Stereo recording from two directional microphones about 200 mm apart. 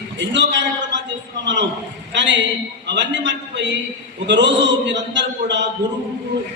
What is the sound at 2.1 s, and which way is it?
A man's voice, 65° right (ahead or behind).